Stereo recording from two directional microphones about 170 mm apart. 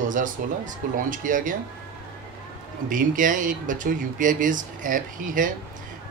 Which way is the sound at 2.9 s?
50° right (ahead or behind).